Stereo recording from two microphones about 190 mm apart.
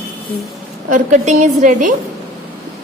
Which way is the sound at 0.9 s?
40° right (ahead or behind).